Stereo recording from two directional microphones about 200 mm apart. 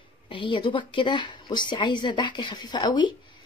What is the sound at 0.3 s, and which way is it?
A woman's voice, 25° left (ahead or behind).